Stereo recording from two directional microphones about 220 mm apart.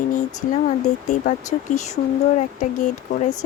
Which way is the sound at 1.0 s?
35° left (ahead or behind).